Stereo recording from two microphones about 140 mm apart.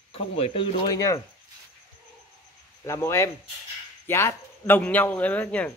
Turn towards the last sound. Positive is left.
turn(degrees=10)  # may be behind; listen again after turning